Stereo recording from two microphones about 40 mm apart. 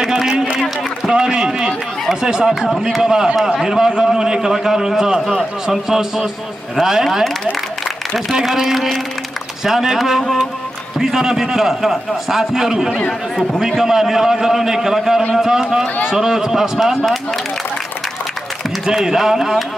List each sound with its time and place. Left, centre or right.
0.0 s run: centre
2.4 s a man's voice: centre
8.4 s a man's voice: centre
11.0 s a man's voice: centre
18.9 s a man's voice: centre